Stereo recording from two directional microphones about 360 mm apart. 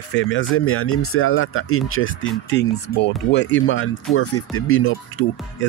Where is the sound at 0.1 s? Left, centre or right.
Left.